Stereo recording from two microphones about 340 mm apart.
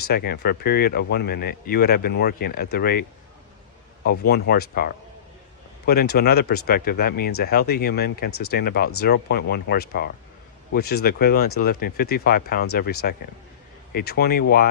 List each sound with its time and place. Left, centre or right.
0.3 s speech: left
4.4 s speech: left